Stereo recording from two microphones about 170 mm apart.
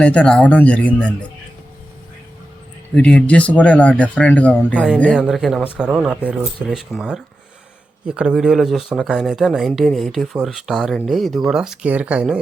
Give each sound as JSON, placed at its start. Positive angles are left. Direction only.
{"t": 0.0, "sound": "speech", "side_deg": 5}
{"t": 2.9, "sound": "speech", "side_deg": 5}